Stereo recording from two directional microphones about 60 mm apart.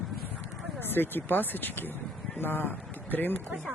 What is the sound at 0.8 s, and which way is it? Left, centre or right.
Speech, left.